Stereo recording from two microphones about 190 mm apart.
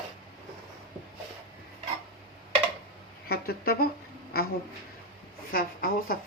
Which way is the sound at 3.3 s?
55° left (ahead or behind).